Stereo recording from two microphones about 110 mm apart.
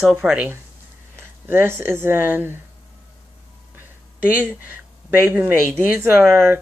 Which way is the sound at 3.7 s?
15° right (ahead or behind).